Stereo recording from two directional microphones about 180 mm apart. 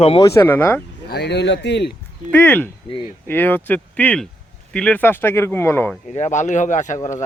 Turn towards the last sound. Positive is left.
turn(degrees=45)  # may be behind; listen again after turning